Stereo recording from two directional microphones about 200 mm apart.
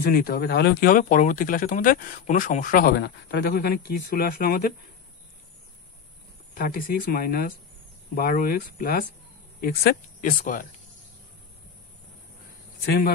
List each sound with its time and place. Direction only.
0.0 s speech: 45° left (ahead or behind)
6.5 s speech: 45° left (ahead or behind)
12.8 s speech: 55° left (ahead or behind)